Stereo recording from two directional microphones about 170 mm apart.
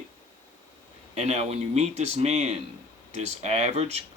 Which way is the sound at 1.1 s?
40° right (ahead or behind).